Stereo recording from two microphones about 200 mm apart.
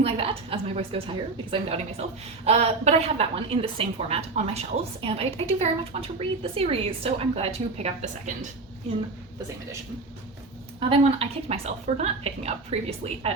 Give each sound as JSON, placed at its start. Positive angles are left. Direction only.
{"t": 0.0, "sound": "a woman's voice", "side_deg": -25}
{"t": 10.8, "sound": "a woman's voice", "side_deg": -30}